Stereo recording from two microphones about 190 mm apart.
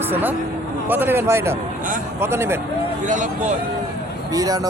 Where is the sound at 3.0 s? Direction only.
40° right (ahead or behind).